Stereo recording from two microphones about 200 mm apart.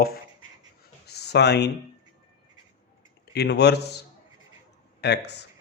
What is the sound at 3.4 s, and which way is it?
Speech, 55° left (ahead or behind).